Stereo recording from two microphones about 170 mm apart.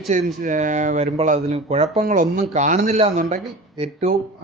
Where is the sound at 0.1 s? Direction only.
50° right (ahead or behind).